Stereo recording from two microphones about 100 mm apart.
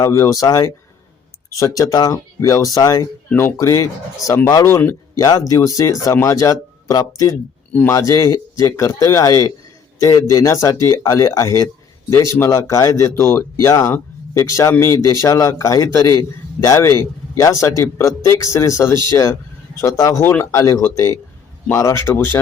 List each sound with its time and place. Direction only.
0.0 s a man's voice: 30° left (ahead or behind)
5.1 s a man's voice: 40° left (ahead or behind)
7.7 s speech: 20° left (ahead or behind)
7.9 s a man's voice: 35° left (ahead or behind)